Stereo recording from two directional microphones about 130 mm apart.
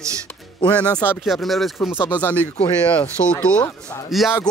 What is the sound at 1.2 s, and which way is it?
Speech, centre (ahead or behind).